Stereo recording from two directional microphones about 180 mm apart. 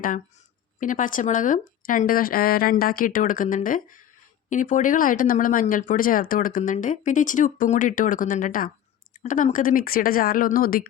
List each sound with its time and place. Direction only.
0.8 s speech: 45° left (ahead or behind)